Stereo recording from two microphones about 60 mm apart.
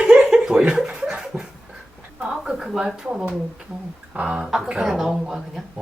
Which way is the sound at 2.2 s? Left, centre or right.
Centre.